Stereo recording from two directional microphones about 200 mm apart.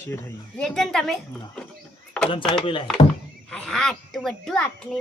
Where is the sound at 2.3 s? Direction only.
25° left (ahead or behind).